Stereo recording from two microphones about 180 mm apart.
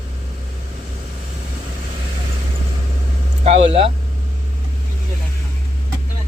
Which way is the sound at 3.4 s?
35° right (ahead or behind).